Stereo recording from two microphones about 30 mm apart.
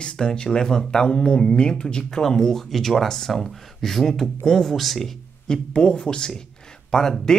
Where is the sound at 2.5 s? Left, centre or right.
Centre.